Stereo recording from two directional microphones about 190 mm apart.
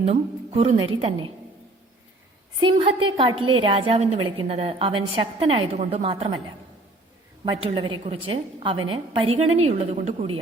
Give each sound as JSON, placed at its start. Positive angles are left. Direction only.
{"t": 0.0, "sound": "a woman's voice", "side_deg": -30}
{"t": 3.2, "sound": "a woman's voice", "side_deg": -25}
{"t": 7.4, "sound": "a woman's voice", "side_deg": -30}